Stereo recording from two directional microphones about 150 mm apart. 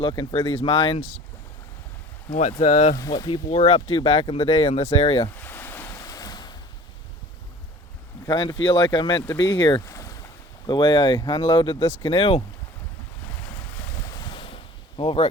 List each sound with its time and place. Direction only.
0.0 s speech: 35° left (ahead or behind)
2.5 s speech: 45° left (ahead or behind)
2.9 s speech: 20° left (ahead or behind)
5.4 s a sound: 10° left (ahead or behind)
5.9 s waves: 25° left (ahead or behind)
8.3 s speech: 30° left (ahead or behind)
14.0 s ocean: 25° left (ahead or behind)